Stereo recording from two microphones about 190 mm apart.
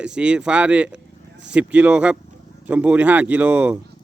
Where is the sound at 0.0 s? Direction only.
5° right (ahead or behind).